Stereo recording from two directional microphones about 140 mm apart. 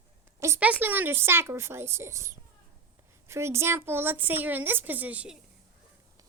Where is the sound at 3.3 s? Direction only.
20° right (ahead or behind).